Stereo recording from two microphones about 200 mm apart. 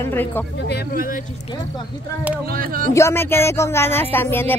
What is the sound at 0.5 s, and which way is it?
Speech, 55° left (ahead or behind).